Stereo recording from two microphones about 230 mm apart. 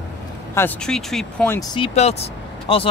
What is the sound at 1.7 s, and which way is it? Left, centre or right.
Speech, left.